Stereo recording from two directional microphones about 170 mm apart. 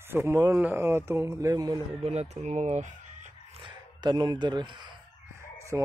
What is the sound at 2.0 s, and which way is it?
Speech, 40° right (ahead or behind).